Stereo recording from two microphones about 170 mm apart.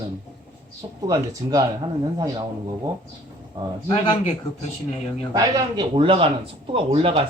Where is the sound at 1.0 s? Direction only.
20° right (ahead or behind).